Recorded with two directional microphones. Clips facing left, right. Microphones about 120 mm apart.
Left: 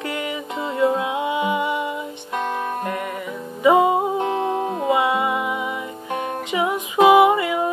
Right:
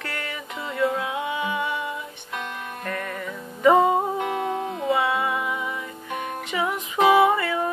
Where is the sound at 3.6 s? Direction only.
10° left (ahead or behind).